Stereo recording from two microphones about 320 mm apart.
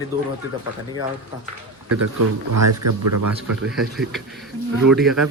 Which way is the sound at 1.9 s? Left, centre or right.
Right.